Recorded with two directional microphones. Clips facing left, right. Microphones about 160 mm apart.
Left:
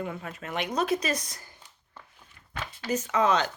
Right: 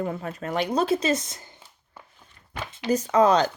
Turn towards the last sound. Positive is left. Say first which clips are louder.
# right 6 dB
turn(degrees=-35)  # may be behind; listen again after turning